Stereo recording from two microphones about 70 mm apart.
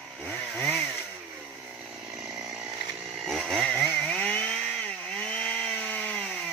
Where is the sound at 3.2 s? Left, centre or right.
Centre.